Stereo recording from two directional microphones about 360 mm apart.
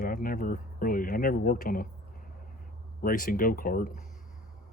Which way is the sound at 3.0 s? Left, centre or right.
Left.